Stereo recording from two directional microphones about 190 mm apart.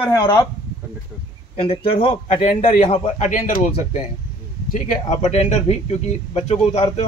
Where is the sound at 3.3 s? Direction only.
45° left (ahead or behind).